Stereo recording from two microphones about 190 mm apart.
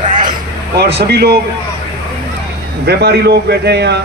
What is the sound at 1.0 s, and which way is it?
Speech, 60° right (ahead or behind).